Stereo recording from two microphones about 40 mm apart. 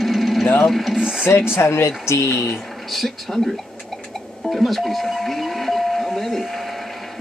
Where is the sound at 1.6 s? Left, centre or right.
Left.